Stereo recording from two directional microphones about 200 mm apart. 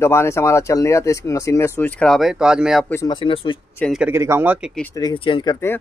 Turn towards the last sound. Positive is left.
turn(degrees=15)  # may be behind; listen again after turning